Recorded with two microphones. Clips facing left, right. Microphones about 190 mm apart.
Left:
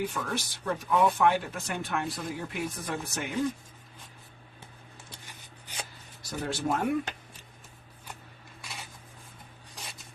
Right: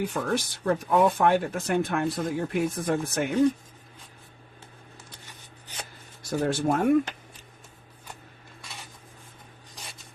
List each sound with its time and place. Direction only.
0.0 s speech: 50° right (ahead or behind)
6.3 s speech: 55° right (ahead or behind)